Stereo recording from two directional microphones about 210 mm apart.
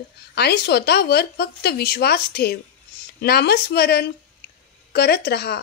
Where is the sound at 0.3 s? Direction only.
50° left (ahead or behind).